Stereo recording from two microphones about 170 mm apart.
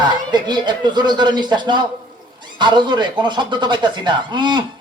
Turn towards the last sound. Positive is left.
turn(degrees=-25)  # may be behind; listen again after turning